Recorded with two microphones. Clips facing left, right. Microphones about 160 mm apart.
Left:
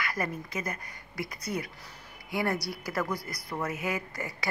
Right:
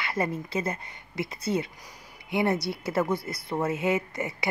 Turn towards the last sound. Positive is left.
turn(degrees=-20)  # may be behind; listen again after turning